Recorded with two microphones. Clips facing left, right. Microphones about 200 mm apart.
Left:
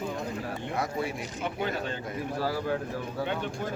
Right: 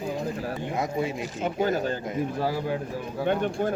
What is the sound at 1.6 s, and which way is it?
Speech, 40° right (ahead or behind).